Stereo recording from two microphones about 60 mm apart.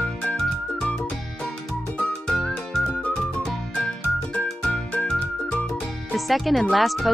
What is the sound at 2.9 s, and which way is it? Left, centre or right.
Music, left.